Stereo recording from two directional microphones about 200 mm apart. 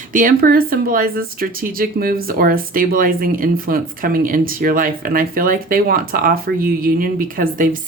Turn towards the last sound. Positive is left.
turn(degrees=-45)  # may be behind; listen again after turning